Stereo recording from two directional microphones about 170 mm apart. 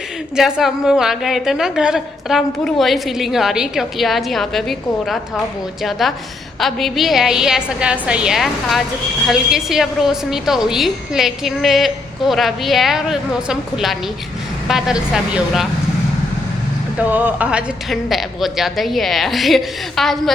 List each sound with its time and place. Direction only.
0.3 s a woman's voice: 5° right (ahead or behind)
17.0 s a woman's voice: 10° right (ahead or behind)